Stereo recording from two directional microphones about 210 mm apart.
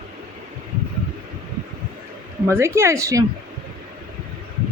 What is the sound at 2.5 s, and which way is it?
Speech, 10° right (ahead or behind).